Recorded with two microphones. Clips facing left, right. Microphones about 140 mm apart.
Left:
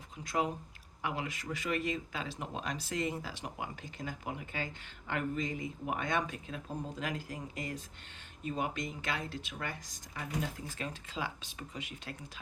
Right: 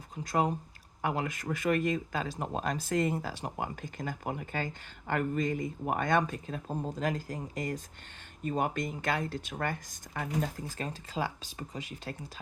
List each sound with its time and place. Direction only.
0.3 s speech: 45° right (ahead or behind)